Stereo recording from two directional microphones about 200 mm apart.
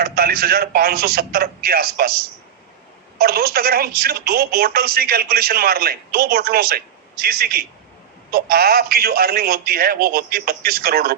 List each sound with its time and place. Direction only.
0.0 s speech: 50° right (ahead or behind)